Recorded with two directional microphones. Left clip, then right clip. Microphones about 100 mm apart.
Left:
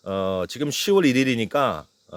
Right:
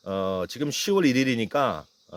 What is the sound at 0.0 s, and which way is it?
Speech, 35° left (ahead or behind).